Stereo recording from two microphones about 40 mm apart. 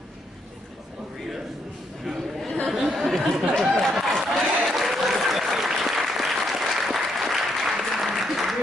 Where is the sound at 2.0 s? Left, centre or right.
Centre.